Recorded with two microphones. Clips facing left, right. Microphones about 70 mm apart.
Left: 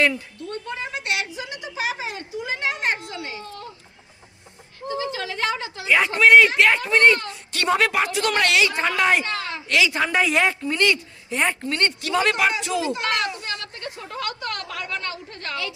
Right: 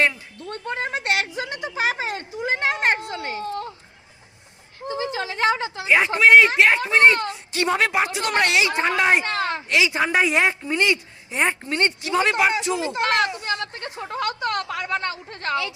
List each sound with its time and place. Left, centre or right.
0.7 s a sound: right
4.9 s a woman's voice: right
6.1 s a woman's voice: centre
7.1 s a woman's voice: right
7.8 s speech: centre
9.2 s a woman's voice: right
9.6 s a woman's voice: centre
12.5 s a sound: right